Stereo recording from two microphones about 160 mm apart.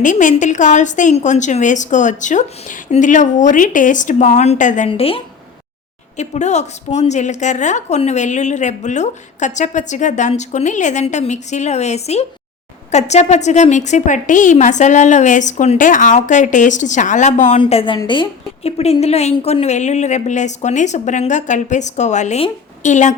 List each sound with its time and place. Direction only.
0.0 s a woman's voice: 50° left (ahead or behind)
4.9 s a woman's voice: 35° left (ahead or behind)
6.1 s a woman's voice: 45° left (ahead or behind)
17.6 s a woman's voice: 35° left (ahead or behind)